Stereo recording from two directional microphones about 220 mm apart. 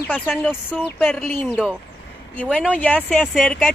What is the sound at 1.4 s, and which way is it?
Speech, 5° right (ahead or behind).